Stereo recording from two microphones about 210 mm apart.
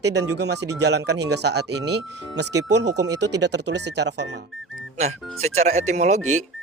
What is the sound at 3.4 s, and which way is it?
Speech, 55° right (ahead or behind).